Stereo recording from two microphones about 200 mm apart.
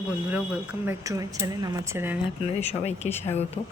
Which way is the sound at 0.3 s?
10° right (ahead or behind).